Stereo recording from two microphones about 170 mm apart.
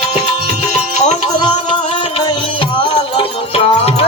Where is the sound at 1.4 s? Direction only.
25° left (ahead or behind).